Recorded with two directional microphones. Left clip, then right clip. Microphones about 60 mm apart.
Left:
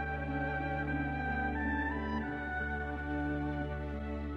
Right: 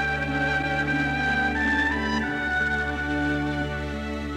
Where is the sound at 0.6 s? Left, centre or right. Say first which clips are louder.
Right 12 dB; left; by 3.8 s centre.